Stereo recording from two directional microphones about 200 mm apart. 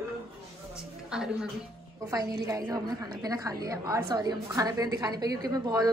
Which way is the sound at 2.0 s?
20° right (ahead or behind).